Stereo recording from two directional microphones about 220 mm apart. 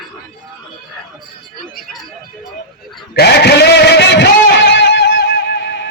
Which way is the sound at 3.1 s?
50° left (ahead or behind).